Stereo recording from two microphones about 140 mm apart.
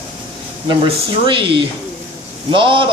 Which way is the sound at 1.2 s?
35° right (ahead or behind).